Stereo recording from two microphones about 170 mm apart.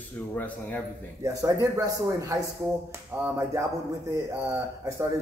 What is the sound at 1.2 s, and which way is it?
Speech, 20° right (ahead or behind).